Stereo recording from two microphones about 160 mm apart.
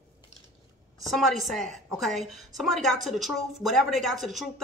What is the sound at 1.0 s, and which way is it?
Speech, centre (ahead or behind).